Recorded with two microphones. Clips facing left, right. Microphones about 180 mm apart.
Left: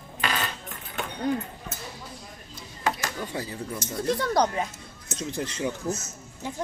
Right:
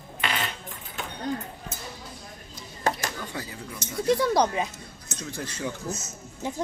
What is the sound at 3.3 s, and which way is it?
Speech, 30° left (ahead or behind).